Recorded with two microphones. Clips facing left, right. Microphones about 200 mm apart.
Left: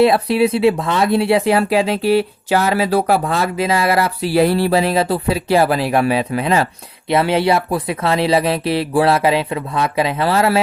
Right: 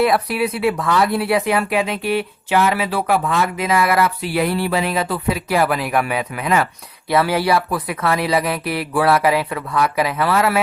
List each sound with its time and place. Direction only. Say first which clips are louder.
0.0 s speech: left 4 dB; 25° left (ahead or behind)